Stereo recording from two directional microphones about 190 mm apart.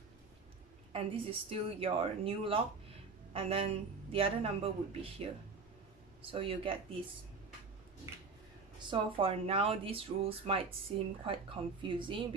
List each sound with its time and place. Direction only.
0.9 s speech: 30° right (ahead or behind)
8.9 s speech: 30° right (ahead or behind)